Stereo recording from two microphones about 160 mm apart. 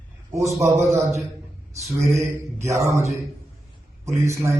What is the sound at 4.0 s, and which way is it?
Speech, 20° right (ahead or behind).